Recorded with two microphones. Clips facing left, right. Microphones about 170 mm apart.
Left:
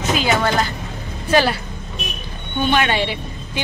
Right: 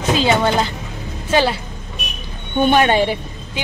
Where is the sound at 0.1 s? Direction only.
30° right (ahead or behind).